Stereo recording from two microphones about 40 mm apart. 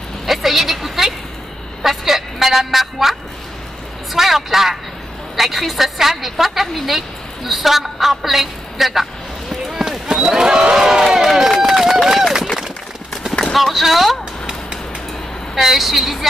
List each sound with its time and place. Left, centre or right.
0.3 s a sound: centre
1.8 s a woman's voice: centre
9.8 s a sound: centre
10.8 s crowd: centre
11.1 s run: centre
13.5 s a woman's voice: centre
15.5 s a woman's voice: centre